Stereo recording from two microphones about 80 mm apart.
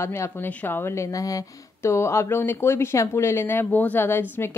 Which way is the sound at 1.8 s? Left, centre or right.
Left.